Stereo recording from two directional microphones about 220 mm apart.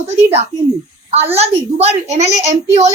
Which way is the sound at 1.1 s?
30° right (ahead or behind).